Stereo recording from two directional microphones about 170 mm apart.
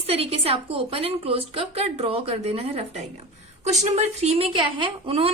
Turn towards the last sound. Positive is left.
turn(degrees=-35)  # may be behind; listen again after turning